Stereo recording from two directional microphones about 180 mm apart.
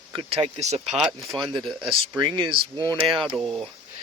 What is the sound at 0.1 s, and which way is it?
Speech, 30° right (ahead or behind).